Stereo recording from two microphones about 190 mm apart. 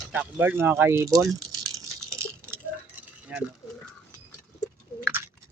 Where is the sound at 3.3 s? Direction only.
5° right (ahead or behind).